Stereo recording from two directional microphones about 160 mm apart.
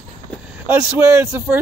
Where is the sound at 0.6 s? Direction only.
10° right (ahead or behind).